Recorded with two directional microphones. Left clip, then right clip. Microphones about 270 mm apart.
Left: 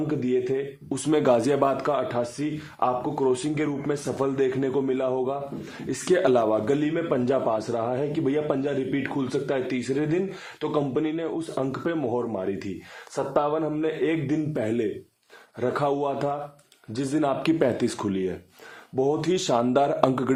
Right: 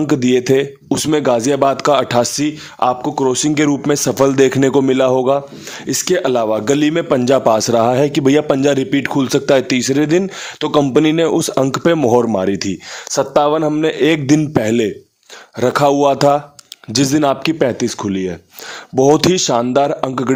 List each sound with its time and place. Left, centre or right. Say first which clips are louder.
0.1 s a man's voice: right 13 dB; right
5.9 s a man's voice: right 6 dB; right
18.9 s a man's voice: right 13 dB; right
19.3 s speech: right 8 dB; right